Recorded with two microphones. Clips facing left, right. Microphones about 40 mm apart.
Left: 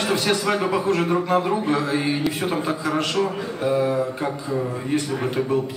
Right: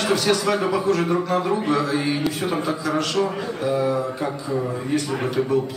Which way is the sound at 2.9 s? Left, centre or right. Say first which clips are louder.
Even; left.